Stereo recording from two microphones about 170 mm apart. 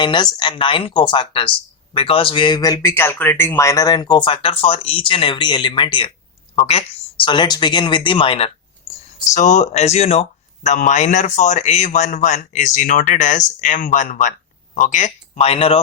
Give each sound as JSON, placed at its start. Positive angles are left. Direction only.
{"t": 0.0, "sound": "speech", "side_deg": 25}
{"t": 9.3, "sound": "speech", "side_deg": 45}